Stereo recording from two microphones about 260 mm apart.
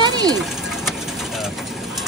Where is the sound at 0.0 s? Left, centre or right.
Centre.